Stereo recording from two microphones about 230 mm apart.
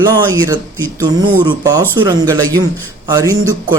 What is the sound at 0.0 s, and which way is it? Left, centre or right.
A man's voice, centre.